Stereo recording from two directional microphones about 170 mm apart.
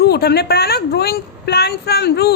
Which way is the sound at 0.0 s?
70° left (ahead or behind).